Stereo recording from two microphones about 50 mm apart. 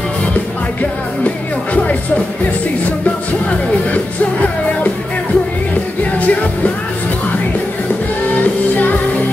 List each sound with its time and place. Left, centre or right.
3.4 s music: left
6.1 s music: left